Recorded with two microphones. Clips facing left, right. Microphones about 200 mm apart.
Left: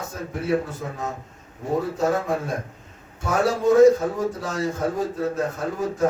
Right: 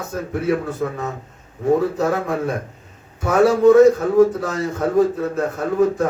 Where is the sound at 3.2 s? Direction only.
60° right (ahead or behind).